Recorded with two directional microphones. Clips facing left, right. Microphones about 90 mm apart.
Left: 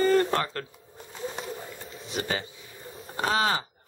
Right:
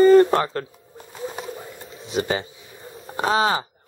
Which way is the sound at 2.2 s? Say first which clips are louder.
Right 7 dB; 25° right (ahead or behind).